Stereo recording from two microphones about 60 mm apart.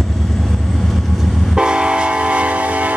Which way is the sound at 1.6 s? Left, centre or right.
Centre.